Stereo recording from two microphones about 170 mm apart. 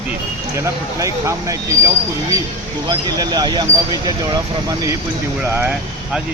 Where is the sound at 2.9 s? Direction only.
25° right (ahead or behind).